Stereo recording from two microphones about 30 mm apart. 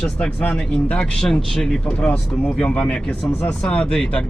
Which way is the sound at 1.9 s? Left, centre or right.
Left.